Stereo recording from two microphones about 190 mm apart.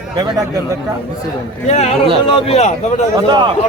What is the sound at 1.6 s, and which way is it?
A man's voice, 35° left (ahead or behind).